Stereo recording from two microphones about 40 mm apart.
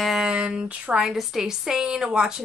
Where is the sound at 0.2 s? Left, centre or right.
Right.